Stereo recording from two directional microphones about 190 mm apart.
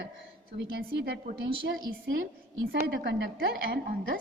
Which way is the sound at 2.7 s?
60° right (ahead or behind).